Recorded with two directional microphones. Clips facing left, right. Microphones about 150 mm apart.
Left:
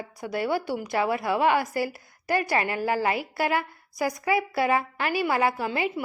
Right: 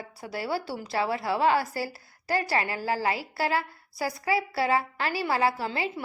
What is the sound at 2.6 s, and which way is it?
A woman's voice, 20° left (ahead or behind).